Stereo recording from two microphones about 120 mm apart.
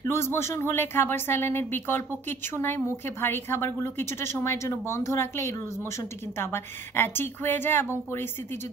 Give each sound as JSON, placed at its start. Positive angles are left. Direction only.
{"t": 0.0, "sound": "speech", "side_deg": 20}